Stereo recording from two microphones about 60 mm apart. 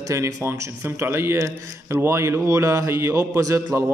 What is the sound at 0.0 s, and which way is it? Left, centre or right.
Speech, right.